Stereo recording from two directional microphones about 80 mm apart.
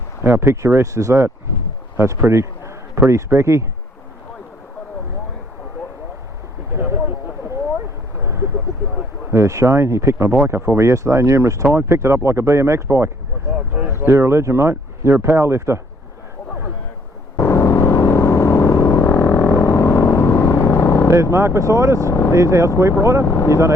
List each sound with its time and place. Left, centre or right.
0.2 s speech: right
2.0 s a sound: right
3.1 s speech: right
6.7 s a sound: right
8.2 s vehicle: right
9.3 s speech: right
17.3 s vehicle: left
21.1 s speech: right
23.2 s speech: left